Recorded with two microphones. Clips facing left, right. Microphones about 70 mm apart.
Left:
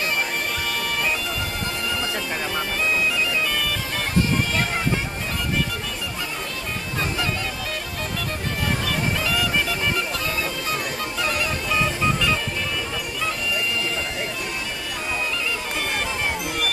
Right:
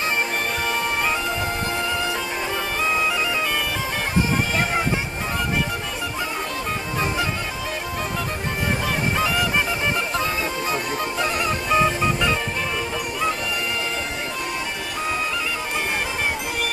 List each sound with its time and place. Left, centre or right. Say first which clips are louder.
8.9 s honk: right 2 dB; right
11.2 s music: even; right